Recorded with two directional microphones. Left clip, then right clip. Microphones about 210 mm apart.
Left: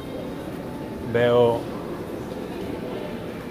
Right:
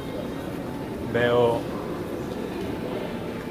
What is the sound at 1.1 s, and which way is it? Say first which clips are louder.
Speech: left 3 dB; 40° left (ahead or behind).